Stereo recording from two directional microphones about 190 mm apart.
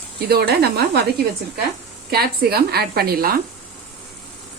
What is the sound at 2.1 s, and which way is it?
A woman's voice, 55° right (ahead or behind).